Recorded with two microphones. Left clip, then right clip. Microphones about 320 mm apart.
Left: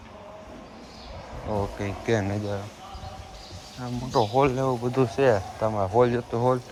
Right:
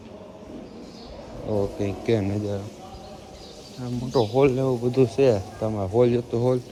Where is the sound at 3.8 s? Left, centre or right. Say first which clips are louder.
Right 1 dB; centre.